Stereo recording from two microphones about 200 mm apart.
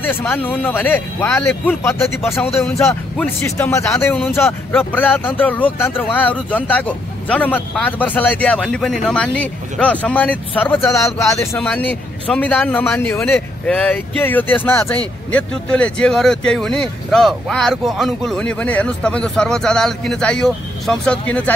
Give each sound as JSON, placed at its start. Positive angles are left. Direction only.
{"t": 0.0, "sound": "speech", "side_deg": 10}
{"t": 2.5, "sound": "speech", "side_deg": 0}